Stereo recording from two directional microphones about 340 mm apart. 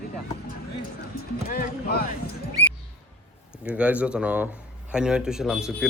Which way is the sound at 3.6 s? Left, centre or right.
Centre.